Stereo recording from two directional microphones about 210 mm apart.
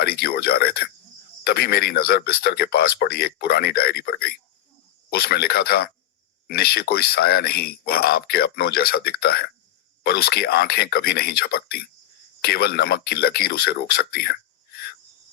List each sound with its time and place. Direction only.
0.0 s speech: 50° left (ahead or behind)